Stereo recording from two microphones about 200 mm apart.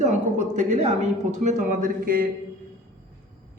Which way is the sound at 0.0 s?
35° right (ahead or behind).